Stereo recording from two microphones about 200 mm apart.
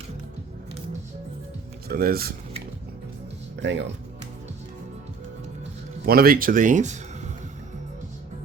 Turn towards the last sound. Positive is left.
turn(degrees=-35)  # may be behind; listen again after turning